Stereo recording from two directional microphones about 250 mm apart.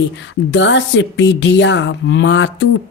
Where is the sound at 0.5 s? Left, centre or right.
Left.